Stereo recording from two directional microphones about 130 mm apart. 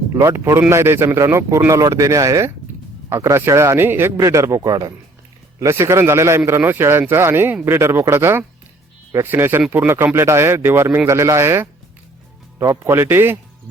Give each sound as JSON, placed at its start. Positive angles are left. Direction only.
{"t": 0.1, "sound": "speech", "side_deg": -25}